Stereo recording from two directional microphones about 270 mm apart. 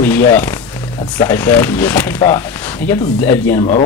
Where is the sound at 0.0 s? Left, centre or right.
Centre.